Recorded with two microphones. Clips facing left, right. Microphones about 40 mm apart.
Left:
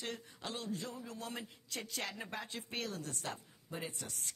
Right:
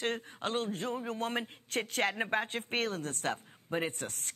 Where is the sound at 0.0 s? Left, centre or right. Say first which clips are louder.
Right 9 dB; right.